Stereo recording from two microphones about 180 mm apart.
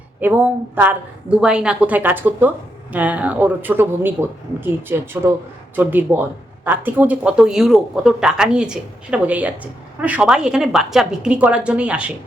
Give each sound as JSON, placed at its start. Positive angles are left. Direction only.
{"t": 0.2, "sound": "a woman's voice", "side_deg": -10}